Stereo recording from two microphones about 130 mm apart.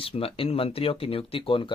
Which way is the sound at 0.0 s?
45° left (ahead or behind).